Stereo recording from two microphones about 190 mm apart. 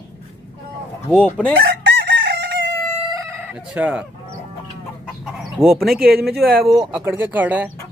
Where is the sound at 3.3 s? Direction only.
5° right (ahead or behind).